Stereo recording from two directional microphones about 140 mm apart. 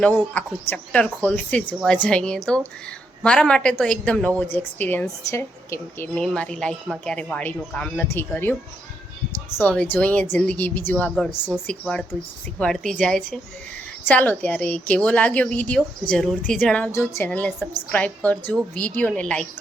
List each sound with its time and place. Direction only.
0.0 s a woman's voice: 10° left (ahead or behind)
6.1 s a woman's voice: 5° left (ahead or behind)